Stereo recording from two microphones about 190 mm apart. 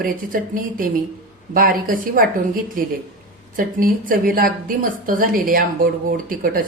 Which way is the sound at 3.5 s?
45° right (ahead or behind).